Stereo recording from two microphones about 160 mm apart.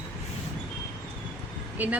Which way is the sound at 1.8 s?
10° right (ahead or behind).